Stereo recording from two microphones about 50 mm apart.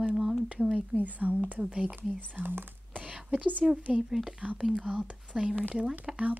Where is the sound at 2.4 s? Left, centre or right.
Right.